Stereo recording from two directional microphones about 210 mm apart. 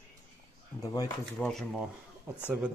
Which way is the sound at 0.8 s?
15° left (ahead or behind).